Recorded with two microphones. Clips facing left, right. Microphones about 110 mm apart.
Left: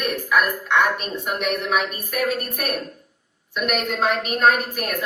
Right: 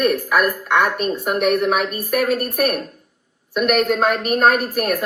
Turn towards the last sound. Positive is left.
turn(degrees=-45)  # may be behind; listen again after turning